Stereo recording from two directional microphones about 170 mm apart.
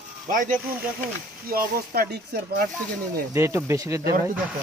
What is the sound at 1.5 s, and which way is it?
Speech, 60° right (ahead or behind).